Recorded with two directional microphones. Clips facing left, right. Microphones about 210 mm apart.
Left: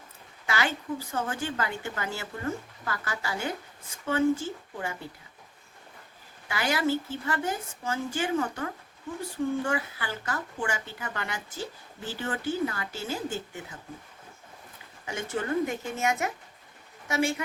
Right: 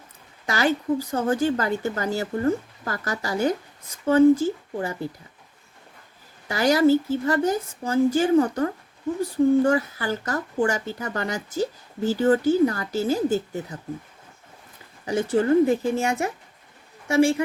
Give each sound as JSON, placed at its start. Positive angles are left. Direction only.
{"t": 0.4, "sound": "speech", "side_deg": -40}
{"t": 6.5, "sound": "speech", "side_deg": -40}
{"t": 15.0, "sound": "speech", "side_deg": -35}